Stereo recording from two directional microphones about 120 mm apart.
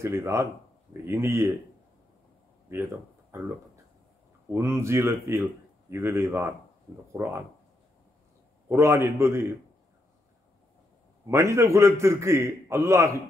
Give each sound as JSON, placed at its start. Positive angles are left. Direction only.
{"t": 0.0, "sound": "speech", "side_deg": -25}
{"t": 2.7, "sound": "speech", "side_deg": -20}
{"t": 8.6, "sound": "speech", "side_deg": -20}
{"t": 11.2, "sound": "speech", "side_deg": -25}